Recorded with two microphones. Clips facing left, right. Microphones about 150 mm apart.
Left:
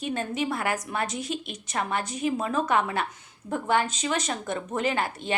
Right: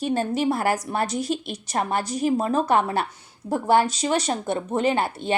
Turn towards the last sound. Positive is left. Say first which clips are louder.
# right 5 dB
turn(degrees=-30)  # may be behind; listen again after turning